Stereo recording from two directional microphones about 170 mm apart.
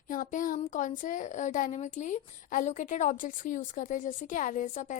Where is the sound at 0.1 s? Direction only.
50° left (ahead or behind).